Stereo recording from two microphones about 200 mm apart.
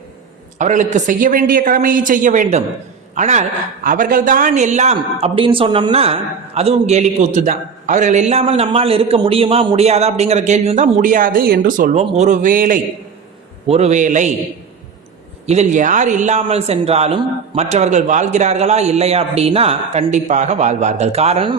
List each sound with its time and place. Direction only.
0.6 s a man's voice: 40° right (ahead or behind)
13.7 s a man's voice: 30° right (ahead or behind)
15.4 s a man's voice: 35° right (ahead or behind)